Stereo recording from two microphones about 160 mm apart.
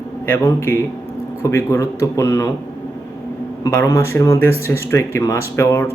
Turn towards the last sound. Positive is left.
turn(degrees=15)  # may be behind; listen again after turning